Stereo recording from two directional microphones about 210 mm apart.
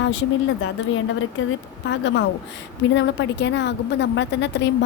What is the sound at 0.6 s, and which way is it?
A woman's voice, 65° left (ahead or behind).